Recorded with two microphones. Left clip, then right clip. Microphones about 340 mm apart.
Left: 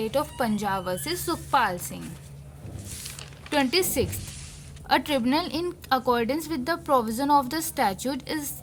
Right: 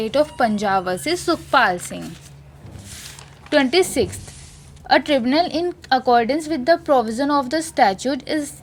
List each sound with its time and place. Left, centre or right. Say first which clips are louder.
0.0 s a woman's voice: right 8 dB; left
3.5 s a woman's voice: right 7 dB; left